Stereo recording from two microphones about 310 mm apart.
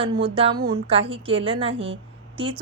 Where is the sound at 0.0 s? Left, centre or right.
Centre.